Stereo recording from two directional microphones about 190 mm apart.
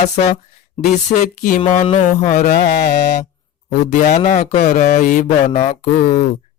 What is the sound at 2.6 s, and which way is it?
Mantra, 55° left (ahead or behind).